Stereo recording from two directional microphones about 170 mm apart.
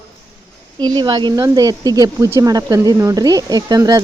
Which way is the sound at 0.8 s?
25° right (ahead or behind).